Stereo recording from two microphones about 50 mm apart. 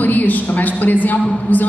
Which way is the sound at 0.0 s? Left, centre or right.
Left.